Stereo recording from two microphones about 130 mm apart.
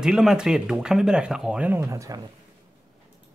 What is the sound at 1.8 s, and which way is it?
Speech, 25° right (ahead or behind).